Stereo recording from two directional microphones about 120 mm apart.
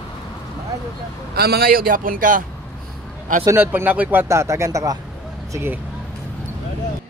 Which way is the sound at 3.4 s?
25° right (ahead or behind).